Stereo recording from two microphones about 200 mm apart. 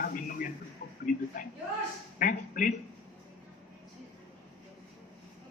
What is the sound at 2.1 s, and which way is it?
Speech, 45° left (ahead or behind).